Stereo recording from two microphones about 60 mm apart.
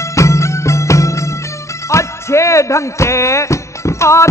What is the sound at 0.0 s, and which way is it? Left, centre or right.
Music, left.